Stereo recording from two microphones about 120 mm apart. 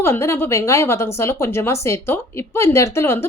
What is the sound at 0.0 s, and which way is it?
A woman's voice, 20° left (ahead or behind).